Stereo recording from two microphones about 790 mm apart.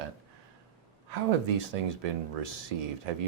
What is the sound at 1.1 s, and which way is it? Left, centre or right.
Speech, right.